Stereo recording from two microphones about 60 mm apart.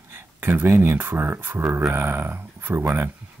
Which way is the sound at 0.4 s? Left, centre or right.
Right.